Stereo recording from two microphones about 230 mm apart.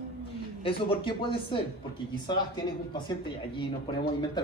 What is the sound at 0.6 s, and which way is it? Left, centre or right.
A man's voice, left.